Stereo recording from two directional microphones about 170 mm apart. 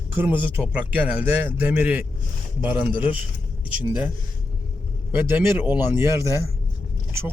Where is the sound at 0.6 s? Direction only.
5° right (ahead or behind).